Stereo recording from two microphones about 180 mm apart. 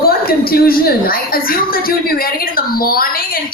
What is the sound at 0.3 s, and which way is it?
Speech, 55° left (ahead or behind).